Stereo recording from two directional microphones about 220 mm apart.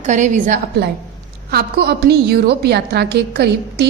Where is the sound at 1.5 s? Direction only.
45° right (ahead or behind).